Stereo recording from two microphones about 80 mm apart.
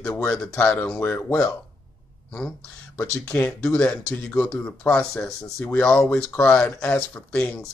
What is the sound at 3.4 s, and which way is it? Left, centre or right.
Speech, centre.